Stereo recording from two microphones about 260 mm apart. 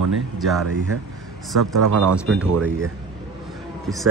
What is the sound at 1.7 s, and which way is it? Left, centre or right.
Speech, right.